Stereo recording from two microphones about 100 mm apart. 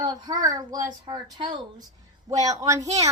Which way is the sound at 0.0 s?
45° right (ahead or behind).